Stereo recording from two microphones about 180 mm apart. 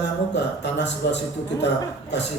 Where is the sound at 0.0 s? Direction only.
75° left (ahead or behind).